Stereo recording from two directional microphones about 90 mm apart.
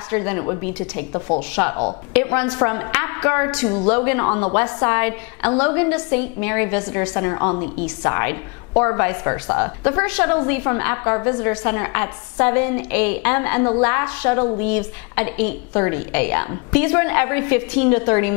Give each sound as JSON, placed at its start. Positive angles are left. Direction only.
{"t": 0.1, "sound": "a woman's voice", "side_deg": 20}